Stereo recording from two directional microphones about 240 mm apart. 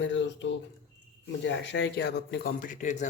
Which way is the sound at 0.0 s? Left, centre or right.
Left.